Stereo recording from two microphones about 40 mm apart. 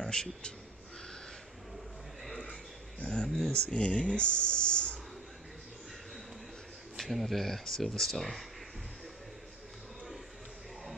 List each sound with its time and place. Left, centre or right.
0.0 s a man's voice: centre
3.0 s speech: left
3.3 s speech: centre
3.5 s speech: left
7.0 s speech: centre